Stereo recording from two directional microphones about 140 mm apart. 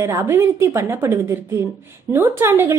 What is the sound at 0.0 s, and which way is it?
A woman's voice, 20° right (ahead or behind).